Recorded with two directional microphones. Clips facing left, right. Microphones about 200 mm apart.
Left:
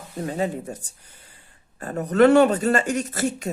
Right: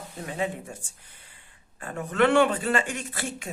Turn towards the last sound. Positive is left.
turn(degrees=40)  # may be behind; listen again after turning